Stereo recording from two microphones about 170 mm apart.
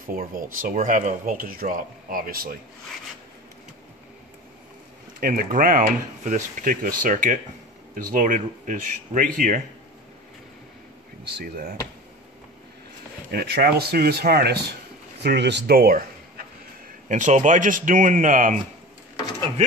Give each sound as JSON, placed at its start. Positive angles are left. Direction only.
{"t": 0.1, "sound": "speech", "side_deg": -55}
{"t": 5.2, "sound": "speech", "side_deg": -60}
{"t": 11.3, "sound": "speech", "side_deg": -60}
{"t": 13.3, "sound": "speech", "side_deg": -75}
{"t": 15.2, "sound": "speech", "side_deg": -85}
{"t": 17.1, "sound": "speech", "side_deg": -45}